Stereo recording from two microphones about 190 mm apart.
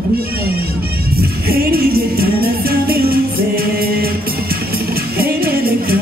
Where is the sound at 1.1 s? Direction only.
55° right (ahead or behind).